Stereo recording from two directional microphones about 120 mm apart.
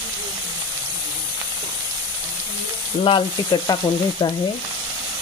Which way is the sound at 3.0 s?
40° left (ahead or behind).